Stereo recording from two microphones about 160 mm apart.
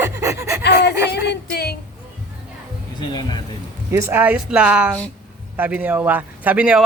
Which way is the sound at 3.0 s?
25° left (ahead or behind).